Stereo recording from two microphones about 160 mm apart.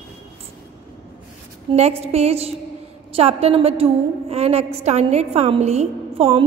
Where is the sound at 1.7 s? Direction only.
40° right (ahead or behind).